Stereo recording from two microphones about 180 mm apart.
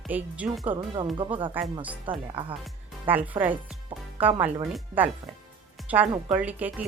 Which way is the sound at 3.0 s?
10° right (ahead or behind).